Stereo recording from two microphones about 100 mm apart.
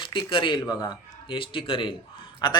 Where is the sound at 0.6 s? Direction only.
45° left (ahead or behind).